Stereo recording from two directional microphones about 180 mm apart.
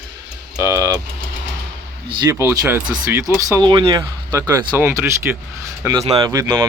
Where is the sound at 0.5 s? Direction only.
15° right (ahead or behind).